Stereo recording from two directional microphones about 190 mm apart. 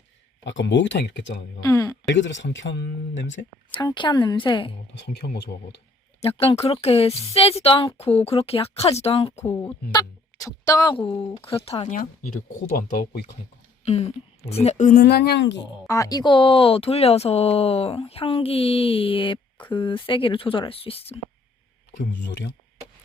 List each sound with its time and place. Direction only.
0.4 s speech: 70° left (ahead or behind)
1.6 s a sound: 15° left (ahead or behind)
2.0 s speech: 70° left (ahead or behind)
3.7 s speech: 25° left (ahead or behind)
4.9 s speech: 60° left (ahead or behind)
6.2 s a woman's voice: 30° left (ahead or behind); by 13.2 s 50° left (ahead or behind)
13.8 s a woman's voice: 35° left (ahead or behind)
15.0 s speech: 60° left (ahead or behind)
15.9 s speech: 20° left (ahead or behind)